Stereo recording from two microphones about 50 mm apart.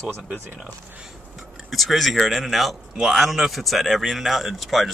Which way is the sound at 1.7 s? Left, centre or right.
Centre.